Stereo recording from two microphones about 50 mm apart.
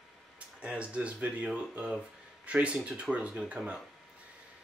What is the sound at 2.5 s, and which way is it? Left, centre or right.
Speech, right.